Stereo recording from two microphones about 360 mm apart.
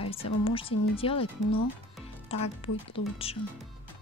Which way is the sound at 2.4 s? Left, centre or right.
Centre.